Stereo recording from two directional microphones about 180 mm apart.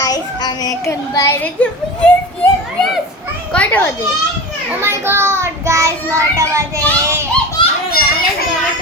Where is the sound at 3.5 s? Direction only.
10° left (ahead or behind).